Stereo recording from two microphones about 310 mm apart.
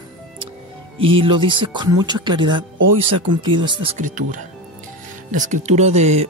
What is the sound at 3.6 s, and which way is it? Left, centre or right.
Speech, centre.